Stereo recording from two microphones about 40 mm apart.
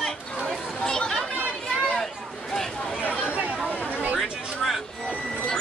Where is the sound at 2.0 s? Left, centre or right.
Centre.